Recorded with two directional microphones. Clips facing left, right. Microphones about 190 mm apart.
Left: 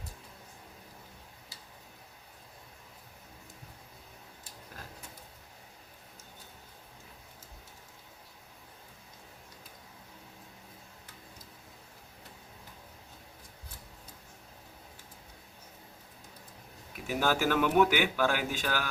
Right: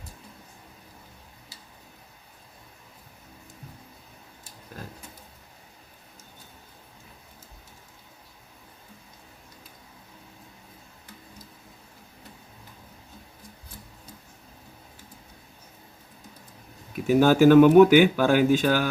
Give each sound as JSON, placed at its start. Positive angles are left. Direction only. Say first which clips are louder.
{"t": 17.2, "sound": "speech", "louder": "right 13 dB", "side_deg": -20}